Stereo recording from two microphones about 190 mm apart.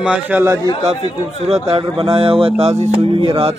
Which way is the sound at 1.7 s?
30° right (ahead or behind).